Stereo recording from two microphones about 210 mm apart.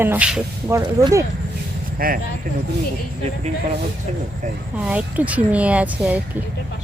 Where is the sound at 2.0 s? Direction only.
45° right (ahead or behind).